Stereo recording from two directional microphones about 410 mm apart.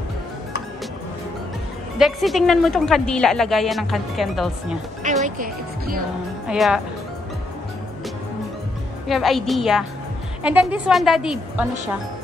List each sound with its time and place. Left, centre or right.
2.0 s speech: centre
5.2 s speech: centre
6.4 s speech: centre
9.0 s speech: centre